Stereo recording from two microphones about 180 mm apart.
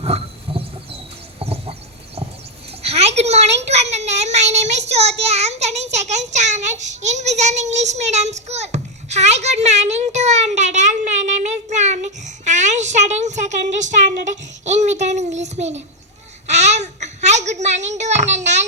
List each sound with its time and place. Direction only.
0.0 s wild animals: 35° right (ahead or behind)
1.4 s goat: 30° right (ahead or behind)
2.8 s a child's voice: 35° right (ahead or behind)
16.5 s babbling: 40° right (ahead or behind)